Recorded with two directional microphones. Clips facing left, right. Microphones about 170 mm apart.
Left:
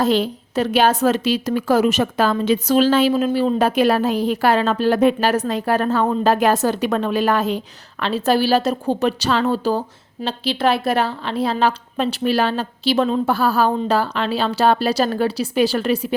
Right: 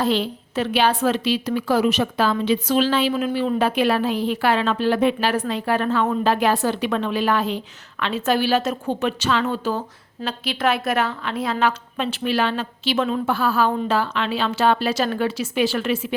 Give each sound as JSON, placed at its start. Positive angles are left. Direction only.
{"t": 0.0, "sound": "a woman's voice", "side_deg": 45}